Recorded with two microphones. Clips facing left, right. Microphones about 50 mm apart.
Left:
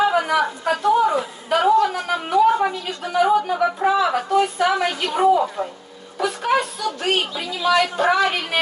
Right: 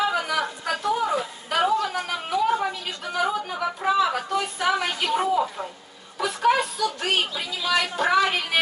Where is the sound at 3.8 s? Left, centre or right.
Centre.